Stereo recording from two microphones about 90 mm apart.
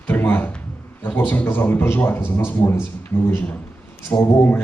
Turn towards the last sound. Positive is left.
turn(degrees=20)  # may be behind; listen again after turning